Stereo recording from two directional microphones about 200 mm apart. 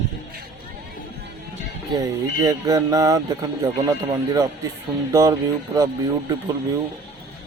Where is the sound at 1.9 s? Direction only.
20° right (ahead or behind).